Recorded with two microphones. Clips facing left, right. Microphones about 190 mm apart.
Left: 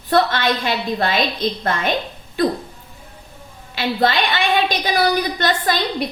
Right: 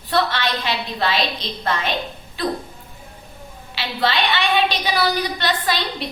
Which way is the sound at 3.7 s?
45° left (ahead or behind).